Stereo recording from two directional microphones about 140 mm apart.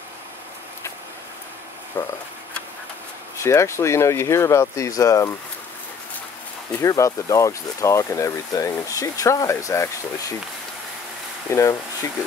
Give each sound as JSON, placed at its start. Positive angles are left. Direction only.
{"t": 2.0, "sound": "speech", "side_deg": 15}
{"t": 3.3, "sound": "speech", "side_deg": 20}
{"t": 6.8, "sound": "speech", "side_deg": 20}
{"t": 11.5, "sound": "speech", "side_deg": 20}